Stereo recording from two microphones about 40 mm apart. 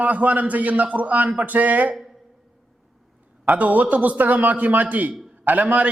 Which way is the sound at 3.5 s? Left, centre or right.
Right.